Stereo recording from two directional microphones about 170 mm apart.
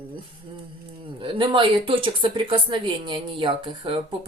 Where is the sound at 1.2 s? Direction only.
30° right (ahead or behind).